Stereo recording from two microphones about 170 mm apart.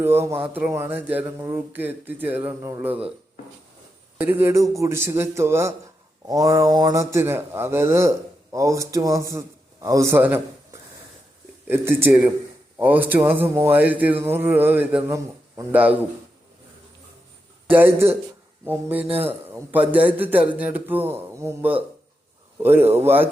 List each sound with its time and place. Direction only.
0.0 s speech: 15° right (ahead or behind)
4.2 s speech: 10° right (ahead or behind)
11.7 s speech: 15° right (ahead or behind)
17.7 s speech: 10° right (ahead or behind)
19.0 s speech: 35° right (ahead or behind)
19.5 s a man's voice: 10° right (ahead or behind)